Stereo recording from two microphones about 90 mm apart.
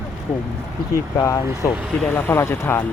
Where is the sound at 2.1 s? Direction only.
25° left (ahead or behind).